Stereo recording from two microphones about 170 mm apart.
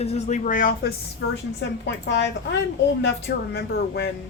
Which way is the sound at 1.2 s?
90° left.